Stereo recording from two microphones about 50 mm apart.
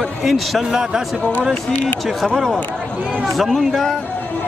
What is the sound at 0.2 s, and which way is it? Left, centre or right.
Speech, centre.